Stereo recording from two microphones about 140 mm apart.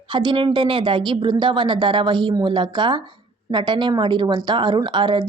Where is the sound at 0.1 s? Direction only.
35° right (ahead or behind).